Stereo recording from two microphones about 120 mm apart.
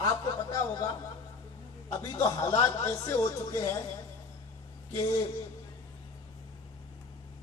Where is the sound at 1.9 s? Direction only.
30° left (ahead or behind).